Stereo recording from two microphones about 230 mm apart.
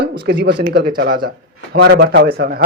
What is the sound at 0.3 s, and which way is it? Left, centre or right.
Speech, right.